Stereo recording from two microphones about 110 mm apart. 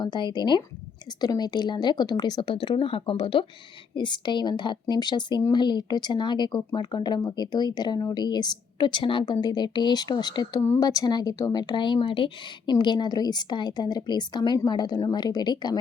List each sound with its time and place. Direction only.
0.0 s speech: 45° left (ahead or behind)